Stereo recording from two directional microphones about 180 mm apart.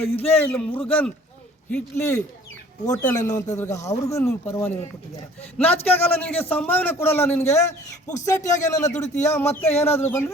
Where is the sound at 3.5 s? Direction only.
15° left (ahead or behind).